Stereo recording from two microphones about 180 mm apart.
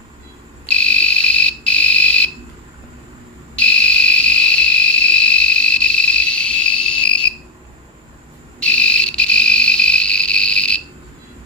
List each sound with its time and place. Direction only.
0.7 s fire alarm: 5° left (ahead or behind)
3.5 s a sound: 5° left (ahead or behind)
8.6 s cricket: 5° left (ahead or behind)